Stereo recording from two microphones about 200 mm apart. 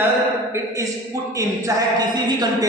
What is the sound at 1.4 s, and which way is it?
A man's voice, 15° right (ahead or behind).